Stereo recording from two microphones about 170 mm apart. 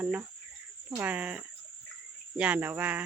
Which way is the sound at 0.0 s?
10° right (ahead or behind).